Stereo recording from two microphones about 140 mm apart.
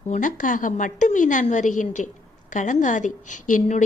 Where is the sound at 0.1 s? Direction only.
70° left (ahead or behind).